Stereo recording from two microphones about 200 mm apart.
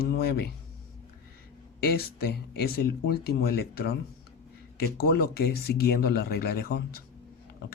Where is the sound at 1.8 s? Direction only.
50° left (ahead or behind).